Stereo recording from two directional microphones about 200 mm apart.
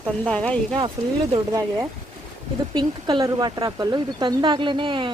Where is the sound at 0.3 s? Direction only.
5° left (ahead or behind).